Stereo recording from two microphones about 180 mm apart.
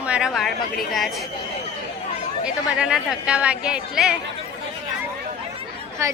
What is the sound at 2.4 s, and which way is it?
A woman's voice, 5° right (ahead or behind).